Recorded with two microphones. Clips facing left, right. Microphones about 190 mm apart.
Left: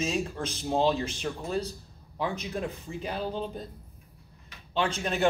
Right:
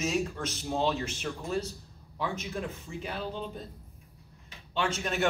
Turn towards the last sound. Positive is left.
turn(degrees=30)  # may be behind; listen again after turning